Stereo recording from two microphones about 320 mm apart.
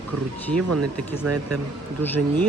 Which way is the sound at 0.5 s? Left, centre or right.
Right.